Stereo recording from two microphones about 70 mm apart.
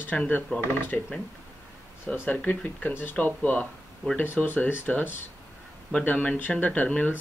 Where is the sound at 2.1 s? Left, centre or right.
Left.